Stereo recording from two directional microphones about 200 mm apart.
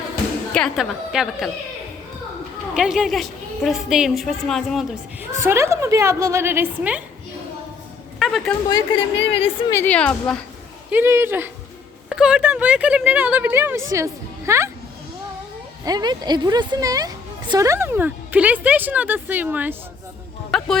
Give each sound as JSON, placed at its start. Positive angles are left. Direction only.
{"t": 0.5, "sound": "a woman's voice", "side_deg": 0}
{"t": 2.7, "sound": "a woman's voice", "side_deg": -5}
{"t": 5.4, "sound": "speech", "side_deg": -15}
{"t": 8.2, "sound": "a woman's voice", "side_deg": 0}
{"t": 9.3, "sound": "a woman's voice", "side_deg": 25}
{"t": 9.7, "sound": "a woman's voice", "side_deg": 5}
{"t": 10.9, "sound": "speech", "side_deg": -10}
{"t": 15.8, "sound": "speech", "side_deg": -20}
{"t": 20.5, "sound": "a woman's voice", "side_deg": 0}